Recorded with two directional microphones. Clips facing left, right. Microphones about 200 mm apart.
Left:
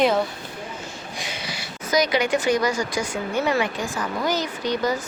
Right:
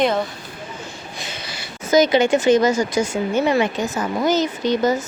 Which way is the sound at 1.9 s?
25° right (ahead or behind).